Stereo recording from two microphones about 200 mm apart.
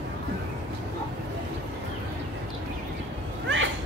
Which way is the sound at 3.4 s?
70° right (ahead or behind).